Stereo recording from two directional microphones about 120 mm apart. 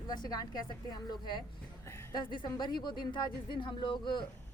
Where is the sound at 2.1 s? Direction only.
40° left (ahead or behind).